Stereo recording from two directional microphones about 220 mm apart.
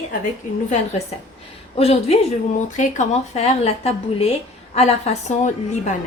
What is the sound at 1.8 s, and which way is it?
A woman's voice, 30° left (ahead or behind).